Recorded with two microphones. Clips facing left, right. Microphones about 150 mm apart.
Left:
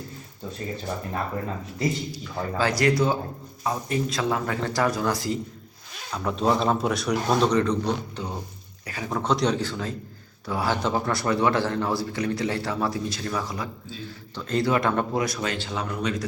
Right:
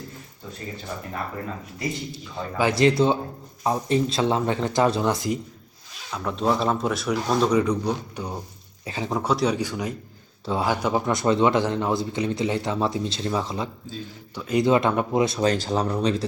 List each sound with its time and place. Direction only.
2.1 s speech: 20° right (ahead or behind)
6.2 s speech: centre (ahead or behind)
8.9 s speech: 25° right (ahead or behind)
9.1 s speech: 5° right (ahead or behind); by 13.7 s 25° right (ahead or behind)
14.3 s speech: 10° right (ahead or behind); by 16.2 s 30° right (ahead or behind)